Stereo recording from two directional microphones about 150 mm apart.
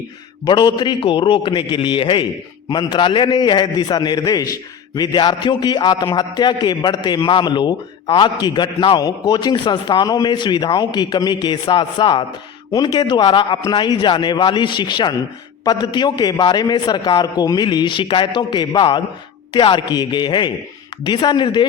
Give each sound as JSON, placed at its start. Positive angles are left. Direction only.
{"t": 0.4, "sound": "a man's voice", "side_deg": 30}